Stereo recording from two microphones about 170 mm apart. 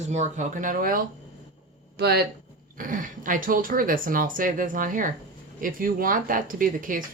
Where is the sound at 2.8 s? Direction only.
50° right (ahead or behind).